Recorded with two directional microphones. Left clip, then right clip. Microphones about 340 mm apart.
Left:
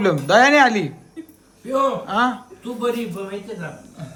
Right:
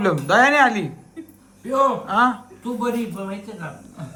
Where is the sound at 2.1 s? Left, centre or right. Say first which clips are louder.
Right 2 dB; centre.